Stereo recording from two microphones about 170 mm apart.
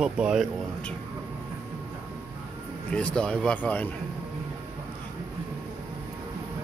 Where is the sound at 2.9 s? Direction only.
5° left (ahead or behind).